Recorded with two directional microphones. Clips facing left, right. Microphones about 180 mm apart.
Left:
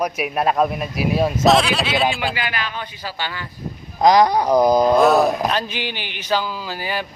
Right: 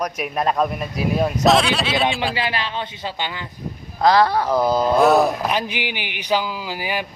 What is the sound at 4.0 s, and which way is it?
A man's voice, 15° left (ahead or behind).